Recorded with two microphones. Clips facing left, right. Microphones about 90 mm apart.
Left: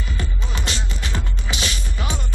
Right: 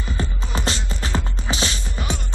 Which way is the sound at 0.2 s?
30° right (ahead or behind).